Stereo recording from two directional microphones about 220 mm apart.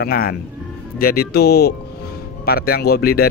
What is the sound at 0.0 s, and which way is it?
Speech, 45° left (ahead or behind).